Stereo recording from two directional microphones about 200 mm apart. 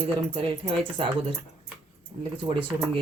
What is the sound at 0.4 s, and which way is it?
Speech, 25° right (ahead or behind).